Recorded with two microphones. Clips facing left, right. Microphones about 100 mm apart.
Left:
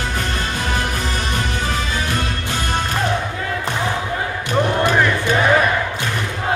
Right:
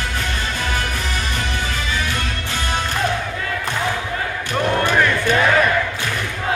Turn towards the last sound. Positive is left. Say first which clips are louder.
# even
turn(degrees=15)  # may be behind; listen again after turning